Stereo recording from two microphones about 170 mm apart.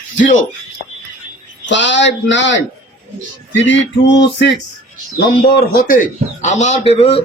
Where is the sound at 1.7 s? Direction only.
90° left.